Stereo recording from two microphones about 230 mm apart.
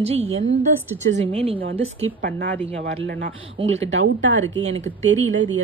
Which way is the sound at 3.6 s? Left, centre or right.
Right.